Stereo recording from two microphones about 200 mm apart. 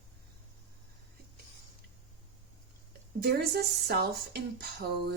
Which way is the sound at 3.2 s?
55° right (ahead or behind).